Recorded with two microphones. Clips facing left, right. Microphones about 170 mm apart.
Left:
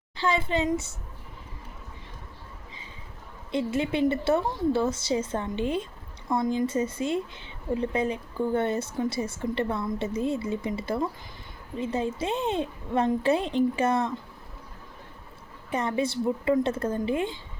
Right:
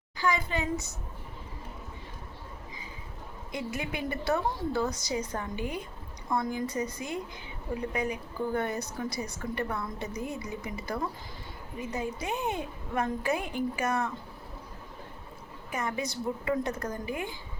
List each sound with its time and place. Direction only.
0.2 s a woman's voice: 25° left (ahead or behind)
3.5 s a woman's voice: 25° left (ahead or behind)
15.7 s a woman's voice: 30° left (ahead or behind)